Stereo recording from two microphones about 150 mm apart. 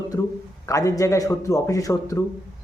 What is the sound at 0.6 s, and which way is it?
Speech, 20° left (ahead or behind).